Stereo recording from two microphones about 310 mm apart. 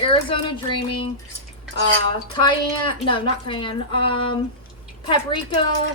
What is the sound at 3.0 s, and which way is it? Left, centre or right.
Speech, centre.